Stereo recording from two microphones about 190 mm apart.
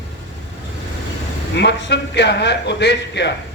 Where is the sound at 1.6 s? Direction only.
65° left (ahead or behind).